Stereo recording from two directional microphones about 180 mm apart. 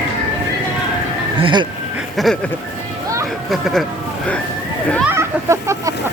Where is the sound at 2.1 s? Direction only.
Centre (ahead or behind).